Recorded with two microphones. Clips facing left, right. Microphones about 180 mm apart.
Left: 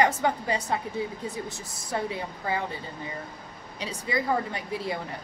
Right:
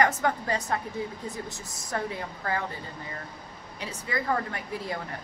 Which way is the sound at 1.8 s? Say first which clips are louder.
Left 2 dB; 15° left (ahead or behind).